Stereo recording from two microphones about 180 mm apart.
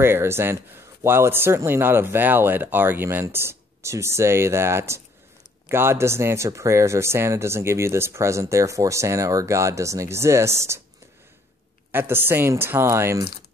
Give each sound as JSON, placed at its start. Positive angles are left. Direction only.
{"t": 0.0, "sound": "speech", "side_deg": -15}
{"t": 11.9, "sound": "speech", "side_deg": -10}